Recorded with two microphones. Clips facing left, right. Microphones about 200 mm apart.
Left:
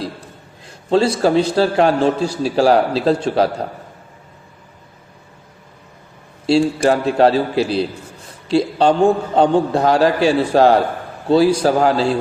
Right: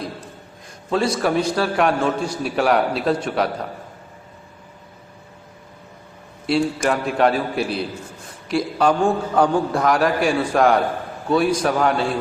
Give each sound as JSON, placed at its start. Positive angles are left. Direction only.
{"t": 0.9, "sound": "a man's voice", "side_deg": 25}
{"t": 6.4, "sound": "a man's voice", "side_deg": 30}